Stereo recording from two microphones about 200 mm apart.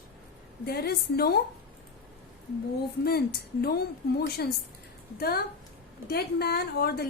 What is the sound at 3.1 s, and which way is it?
Speech, 50° left (ahead or behind).